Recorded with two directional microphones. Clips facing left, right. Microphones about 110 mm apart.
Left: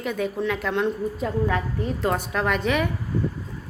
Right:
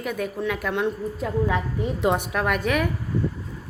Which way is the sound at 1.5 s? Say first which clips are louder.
Even; 15° right (ahead or behind).